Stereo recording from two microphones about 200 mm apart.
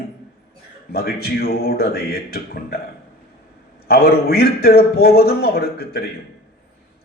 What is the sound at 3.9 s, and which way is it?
A man's voice, 50° left (ahead or behind).